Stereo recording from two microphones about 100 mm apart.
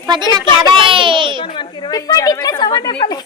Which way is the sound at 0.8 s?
60° right (ahead or behind).